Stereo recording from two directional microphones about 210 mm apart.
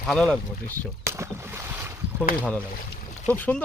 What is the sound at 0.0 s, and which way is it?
Speech, centre (ahead or behind).